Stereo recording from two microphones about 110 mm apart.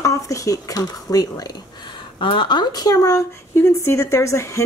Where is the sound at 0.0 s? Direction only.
30° left (ahead or behind).